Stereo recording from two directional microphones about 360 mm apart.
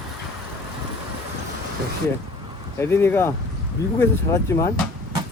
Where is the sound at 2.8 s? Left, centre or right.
Centre.